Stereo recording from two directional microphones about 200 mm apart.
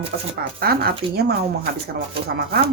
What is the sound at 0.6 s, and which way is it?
Speech, 50° right (ahead or behind).